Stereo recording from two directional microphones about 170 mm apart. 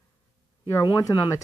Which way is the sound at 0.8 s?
20° left (ahead or behind).